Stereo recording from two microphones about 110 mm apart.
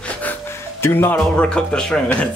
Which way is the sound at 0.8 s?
20° left (ahead or behind).